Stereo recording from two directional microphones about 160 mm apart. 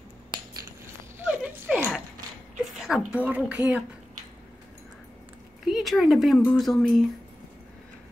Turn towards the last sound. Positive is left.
turn(degrees=0)  # may be behind; listen again after turning